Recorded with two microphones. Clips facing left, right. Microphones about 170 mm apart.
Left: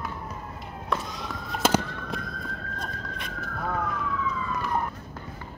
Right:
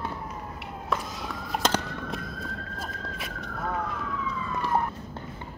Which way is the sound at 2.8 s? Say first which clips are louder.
Even; 5° right (ahead or behind).